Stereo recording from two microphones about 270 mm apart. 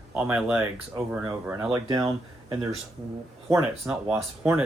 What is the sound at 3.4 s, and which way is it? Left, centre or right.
Speech, right.